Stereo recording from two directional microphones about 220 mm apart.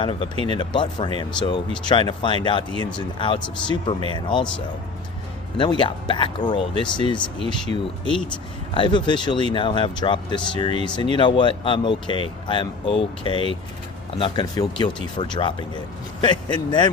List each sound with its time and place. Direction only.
0.0 s speech: 25° left (ahead or behind)